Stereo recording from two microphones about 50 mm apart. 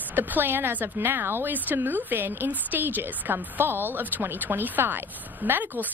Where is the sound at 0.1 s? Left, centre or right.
Right.